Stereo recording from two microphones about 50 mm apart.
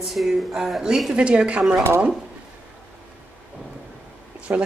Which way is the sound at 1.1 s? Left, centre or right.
Right.